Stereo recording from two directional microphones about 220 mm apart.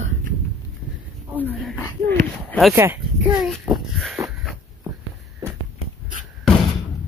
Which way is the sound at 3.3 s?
Centre (ahead or behind).